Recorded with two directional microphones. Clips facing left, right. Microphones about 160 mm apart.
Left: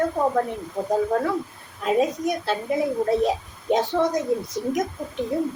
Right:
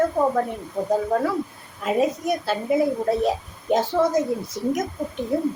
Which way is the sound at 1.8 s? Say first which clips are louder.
Even; 5° right (ahead or behind).